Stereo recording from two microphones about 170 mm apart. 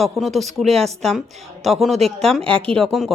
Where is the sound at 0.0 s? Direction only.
Centre (ahead or behind).